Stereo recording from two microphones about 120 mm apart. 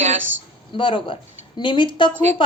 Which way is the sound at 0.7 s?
45° left (ahead or behind).